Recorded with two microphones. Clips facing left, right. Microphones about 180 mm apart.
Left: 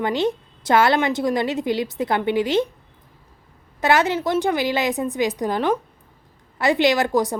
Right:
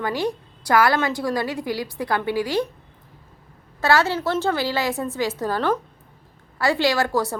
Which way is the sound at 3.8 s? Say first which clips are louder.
Left 1 dB; 20° left (ahead or behind).